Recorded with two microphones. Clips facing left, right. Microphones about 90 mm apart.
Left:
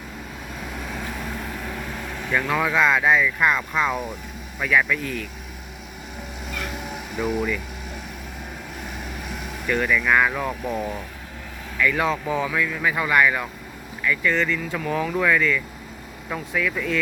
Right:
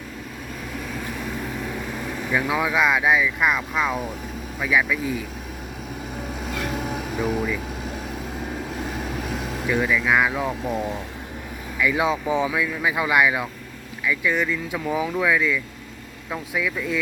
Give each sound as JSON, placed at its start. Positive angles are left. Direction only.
{"t": 2.0, "sound": "speech", "side_deg": -5}
{"t": 6.5, "sound": "vehicle", "side_deg": -35}
{"t": 9.6, "sound": "speech", "side_deg": -5}
{"t": 10.4, "sound": "speech", "side_deg": -25}